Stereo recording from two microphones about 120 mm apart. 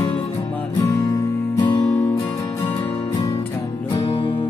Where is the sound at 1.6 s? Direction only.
40° left (ahead or behind).